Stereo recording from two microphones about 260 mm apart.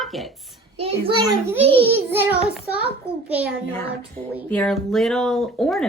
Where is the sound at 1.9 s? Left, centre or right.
Centre.